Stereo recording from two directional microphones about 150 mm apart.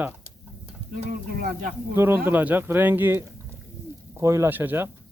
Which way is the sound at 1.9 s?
15° right (ahead or behind).